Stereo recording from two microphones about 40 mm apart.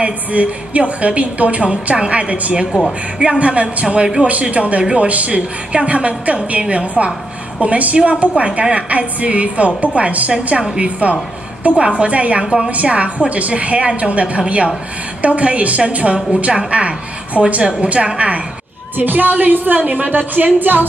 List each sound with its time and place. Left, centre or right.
0.0 s a woman's voice: right
12.4 s a woman's voice: centre
12.7 s a woman's voice: right
18.9 s a woman's voice: right